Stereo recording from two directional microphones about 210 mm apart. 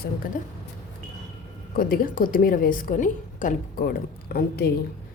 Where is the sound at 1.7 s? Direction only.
45° left (ahead or behind).